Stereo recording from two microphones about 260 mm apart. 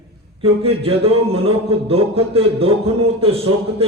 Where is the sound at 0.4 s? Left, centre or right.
Right.